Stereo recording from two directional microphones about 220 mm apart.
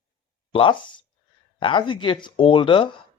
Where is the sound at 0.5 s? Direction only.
20° left (ahead or behind).